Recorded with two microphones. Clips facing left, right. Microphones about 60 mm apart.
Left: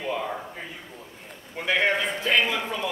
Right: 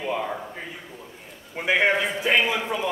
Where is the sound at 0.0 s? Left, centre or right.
Centre.